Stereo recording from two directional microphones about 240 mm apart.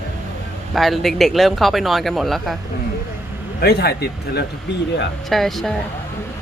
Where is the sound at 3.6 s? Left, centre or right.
Left.